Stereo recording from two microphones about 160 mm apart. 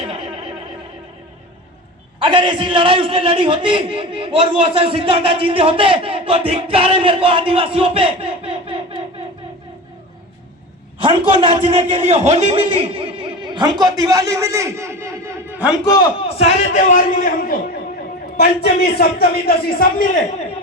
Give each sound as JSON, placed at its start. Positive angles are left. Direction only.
{"t": 2.1, "sound": "a man's voice", "side_deg": -30}
{"t": 11.0, "sound": "a man's voice", "side_deg": -35}
{"t": 16.4, "sound": "a man's voice", "side_deg": 45}
{"t": 18.3, "sound": "a man's voice", "side_deg": 90}